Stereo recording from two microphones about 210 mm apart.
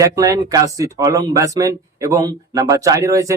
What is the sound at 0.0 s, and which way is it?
Speech, 15° right (ahead or behind).